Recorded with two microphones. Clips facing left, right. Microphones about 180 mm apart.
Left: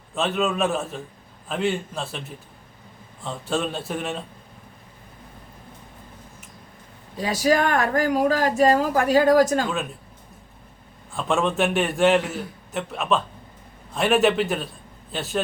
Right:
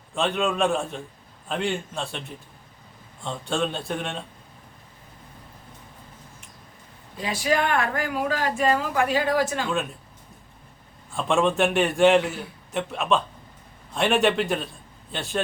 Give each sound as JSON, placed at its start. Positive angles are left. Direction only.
{"t": 0.1, "sound": "a man's voice", "side_deg": 0}
{"t": 3.2, "sound": "a man's voice", "side_deg": 5}
{"t": 7.2, "sound": "speech", "side_deg": 40}
{"t": 11.1, "sound": "a man's voice", "side_deg": 0}